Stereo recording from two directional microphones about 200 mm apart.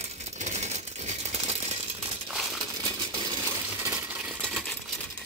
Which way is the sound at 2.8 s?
20° right (ahead or behind).